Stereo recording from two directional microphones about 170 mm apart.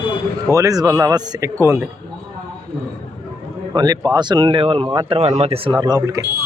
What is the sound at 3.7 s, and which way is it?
Speech, 25° right (ahead or behind).